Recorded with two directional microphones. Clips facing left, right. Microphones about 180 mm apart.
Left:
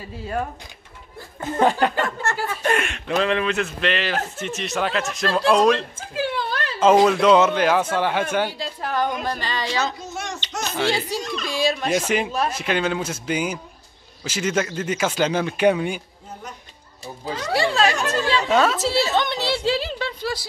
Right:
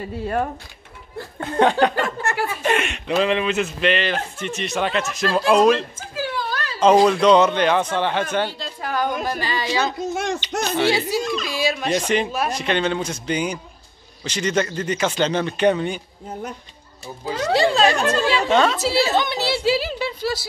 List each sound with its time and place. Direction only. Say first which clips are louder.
1.4 s speech: right 2 dB; 5° left (ahead or behind)
6.1 s a sound: left 1 dB; 25° left (ahead or behind)
6.8 s speech: right 1 dB; 5° left (ahead or behind)
8.8 s speech: right 1 dB; centre (ahead or behind)
10.1 s a child's voice: right 7 dB; 55° right (ahead or behind)
10.8 s speech: right 3 dB; 5° right (ahead or behind)
17.5 s speech: right 3 dB; 20° right (ahead or behind)
18.5 s speech: even; 5° left (ahead or behind)